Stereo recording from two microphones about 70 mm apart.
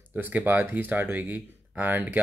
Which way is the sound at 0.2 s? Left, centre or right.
Right.